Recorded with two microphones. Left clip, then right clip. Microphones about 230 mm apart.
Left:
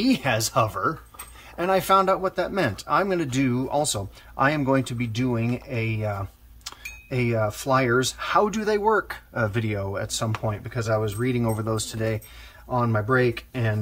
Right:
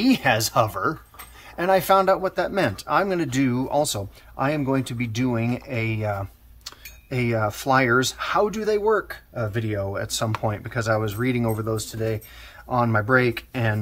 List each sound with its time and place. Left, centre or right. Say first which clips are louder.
0.0 s speech: right 3 dB; centre
12.6 s speech: right 3 dB; centre